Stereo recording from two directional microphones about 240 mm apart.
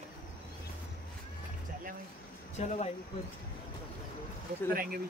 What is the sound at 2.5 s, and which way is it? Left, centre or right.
Speech, left.